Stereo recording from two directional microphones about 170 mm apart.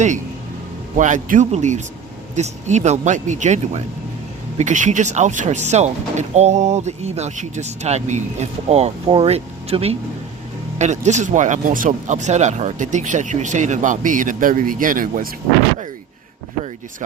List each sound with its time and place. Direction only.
0.9 s speech: 45° right (ahead or behind)